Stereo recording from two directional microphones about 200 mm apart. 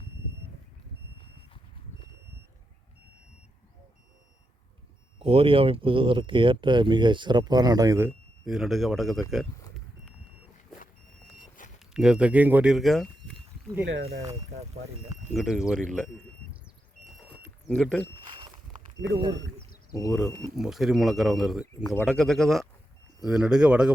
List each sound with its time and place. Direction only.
5.2 s speech: 30° right (ahead or behind)
8.4 s speech: centre (ahead or behind)
11.3 s a sound: 40° left (ahead or behind)
11.9 s speech: 5° right (ahead or behind)
13.9 s speech: 70° right (ahead or behind)
14.3 s speech: 35° right (ahead or behind)
15.4 s speech: centre (ahead or behind)
17.7 s speech: 5° left (ahead or behind)
20.0 s speech: centre (ahead or behind)